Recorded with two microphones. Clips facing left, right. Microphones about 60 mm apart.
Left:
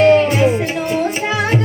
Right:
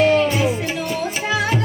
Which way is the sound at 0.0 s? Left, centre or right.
Left.